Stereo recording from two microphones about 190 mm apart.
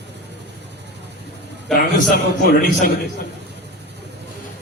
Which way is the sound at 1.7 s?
45° left (ahead or behind).